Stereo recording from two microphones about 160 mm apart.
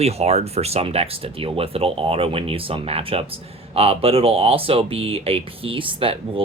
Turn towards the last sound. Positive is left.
turn(degrees=-35)  # may be behind; listen again after turning